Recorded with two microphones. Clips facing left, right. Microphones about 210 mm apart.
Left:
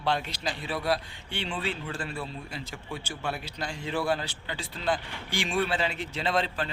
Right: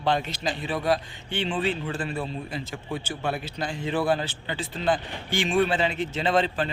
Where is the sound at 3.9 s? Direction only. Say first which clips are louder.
Right 4 dB; 20° right (ahead or behind).